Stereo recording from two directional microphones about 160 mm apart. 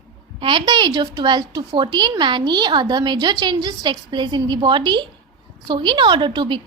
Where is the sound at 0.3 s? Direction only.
30° right (ahead or behind).